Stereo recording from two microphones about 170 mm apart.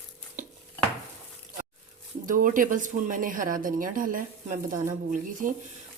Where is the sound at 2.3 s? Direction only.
50° right (ahead or behind).